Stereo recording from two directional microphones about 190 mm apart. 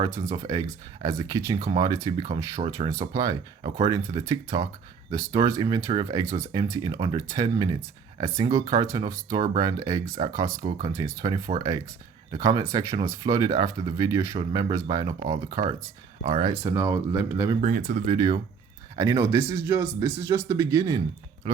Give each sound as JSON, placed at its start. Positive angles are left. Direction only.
{"t": 1.0, "sound": "speech", "side_deg": -15}
{"t": 16.6, "sound": "speech", "side_deg": -15}
{"t": 17.6, "sound": "speech", "side_deg": -45}
{"t": 18.9, "sound": "speech", "side_deg": -15}
{"t": 21.5, "sound": "speech", "side_deg": -30}